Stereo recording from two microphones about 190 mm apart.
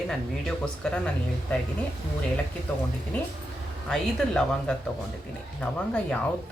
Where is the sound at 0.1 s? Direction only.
5° left (ahead or behind).